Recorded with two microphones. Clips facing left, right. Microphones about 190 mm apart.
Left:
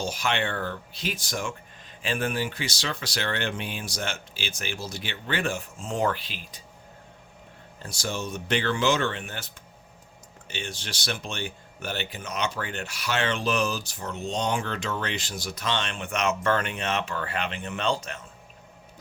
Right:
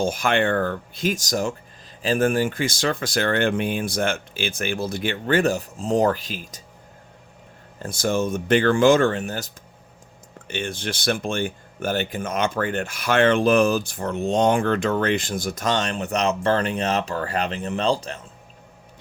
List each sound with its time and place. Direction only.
0.0 s speech: 50° right (ahead or behind)
7.8 s speech: 50° right (ahead or behind)
10.5 s speech: 55° right (ahead or behind); by 18.2 s 35° right (ahead or behind)